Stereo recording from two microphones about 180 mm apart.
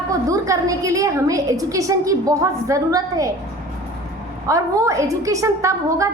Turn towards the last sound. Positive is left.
turn(degrees=-15)  # may be behind; listen again after turning